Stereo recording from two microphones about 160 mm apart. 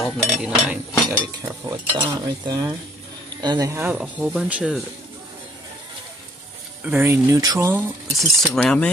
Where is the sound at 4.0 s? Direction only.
5° right (ahead or behind).